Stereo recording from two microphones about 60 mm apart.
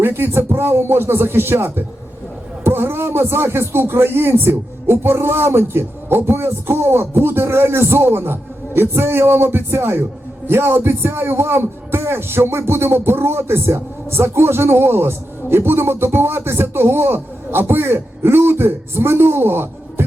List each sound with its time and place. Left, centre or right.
0.0 s a man's voice: right